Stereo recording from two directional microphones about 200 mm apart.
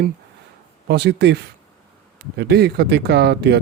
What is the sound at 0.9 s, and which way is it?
Speech, 55° right (ahead or behind).